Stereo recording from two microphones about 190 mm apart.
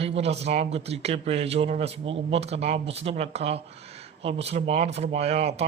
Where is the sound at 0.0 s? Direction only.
35° right (ahead or behind).